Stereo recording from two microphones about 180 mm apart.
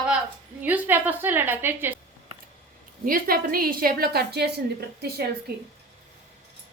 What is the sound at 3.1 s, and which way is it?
A woman's voice, 55° right (ahead or behind).